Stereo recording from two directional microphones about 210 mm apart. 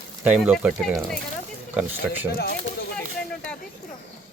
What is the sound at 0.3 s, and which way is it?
Speech, 5° right (ahead or behind).